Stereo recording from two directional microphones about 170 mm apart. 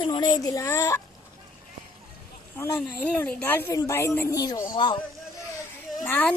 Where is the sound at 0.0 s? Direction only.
25° left (ahead or behind).